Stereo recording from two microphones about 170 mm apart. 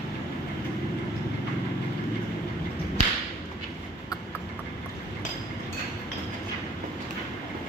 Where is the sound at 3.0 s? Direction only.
50° left (ahead or behind).